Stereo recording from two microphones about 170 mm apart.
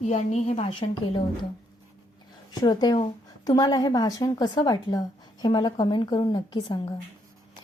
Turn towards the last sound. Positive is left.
turn(degrees=25)  # may be behind; listen again after turning